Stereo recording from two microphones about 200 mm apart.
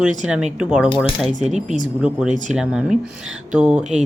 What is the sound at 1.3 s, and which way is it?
Speech, 35° right (ahead or behind).